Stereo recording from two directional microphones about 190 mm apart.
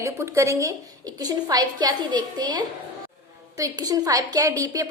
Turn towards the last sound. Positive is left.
turn(degrees=-15)  # may be behind; listen again after turning